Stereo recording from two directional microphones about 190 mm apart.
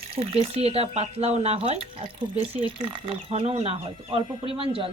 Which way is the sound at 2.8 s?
25° right (ahead or behind).